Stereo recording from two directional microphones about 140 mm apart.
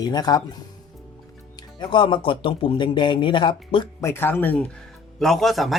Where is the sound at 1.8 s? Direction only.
35° left (ahead or behind).